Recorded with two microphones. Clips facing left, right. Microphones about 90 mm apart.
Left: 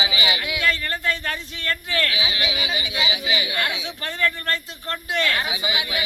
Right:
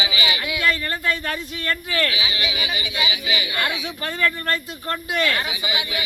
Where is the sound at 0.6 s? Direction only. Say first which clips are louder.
Right 2 dB; 10° right (ahead or behind).